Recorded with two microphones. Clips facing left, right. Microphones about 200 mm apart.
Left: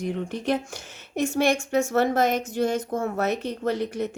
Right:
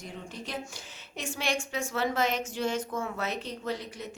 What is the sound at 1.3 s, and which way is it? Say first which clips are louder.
A woman's voice: left 9 dB; 40° left (ahead or behind).